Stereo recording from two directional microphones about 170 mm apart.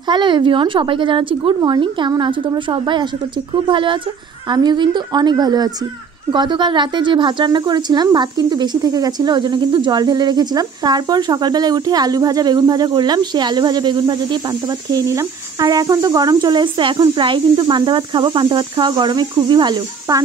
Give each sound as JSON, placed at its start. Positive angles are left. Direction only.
{"t": 0.0, "sound": "a woman's voice", "side_deg": -25}